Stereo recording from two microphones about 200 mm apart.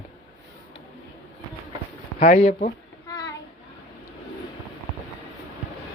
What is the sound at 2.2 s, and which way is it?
Speech, 35° left (ahead or behind).